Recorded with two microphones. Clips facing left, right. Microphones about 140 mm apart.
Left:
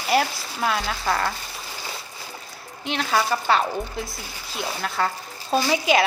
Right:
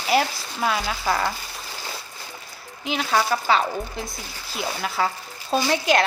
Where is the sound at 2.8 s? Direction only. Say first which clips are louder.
Right 1 dB; centre (ahead or behind).